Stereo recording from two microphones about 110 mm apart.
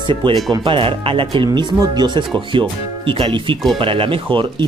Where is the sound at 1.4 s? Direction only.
35° right (ahead or behind).